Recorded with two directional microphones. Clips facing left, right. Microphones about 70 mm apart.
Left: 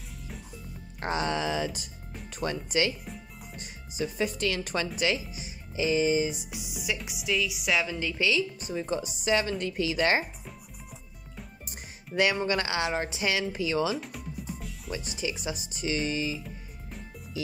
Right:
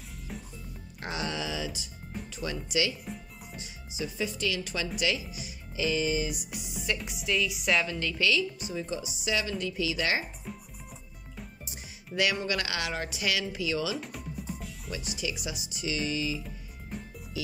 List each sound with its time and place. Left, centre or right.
0.9 s speech: left
6.5 s a woman's voice: centre
8.5 s speech: left
10.4 s music: centre
11.6 s music: left
12.2 s speech: left
13.9 s music: centre
14.9 s speech: left
16.9 s music: centre